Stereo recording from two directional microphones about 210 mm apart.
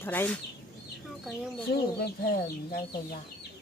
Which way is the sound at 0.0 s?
10° left (ahead or behind).